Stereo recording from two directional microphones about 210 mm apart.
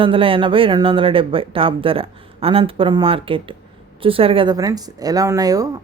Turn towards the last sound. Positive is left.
turn(degrees=-15)  # may be behind; listen again after turning